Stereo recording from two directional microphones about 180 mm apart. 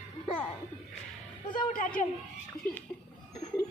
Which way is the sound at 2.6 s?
5° left (ahead or behind).